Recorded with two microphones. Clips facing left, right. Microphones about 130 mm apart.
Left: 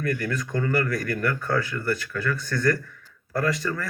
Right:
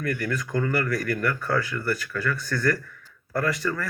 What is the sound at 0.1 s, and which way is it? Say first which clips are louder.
Speech: right 2 dB; 30° left (ahead or behind).